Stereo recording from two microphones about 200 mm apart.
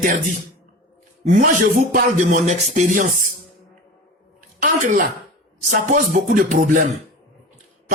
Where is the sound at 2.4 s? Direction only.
40° right (ahead or behind).